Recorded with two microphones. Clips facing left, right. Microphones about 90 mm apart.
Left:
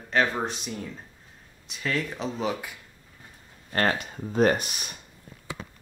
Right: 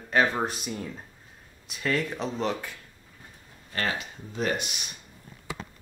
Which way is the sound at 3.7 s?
45° left (ahead or behind).